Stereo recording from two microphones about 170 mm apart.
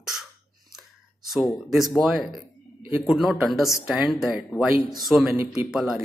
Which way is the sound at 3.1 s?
Centre (ahead or behind).